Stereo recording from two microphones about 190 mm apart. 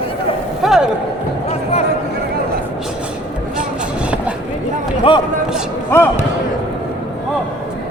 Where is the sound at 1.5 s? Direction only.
35° left (ahead or behind).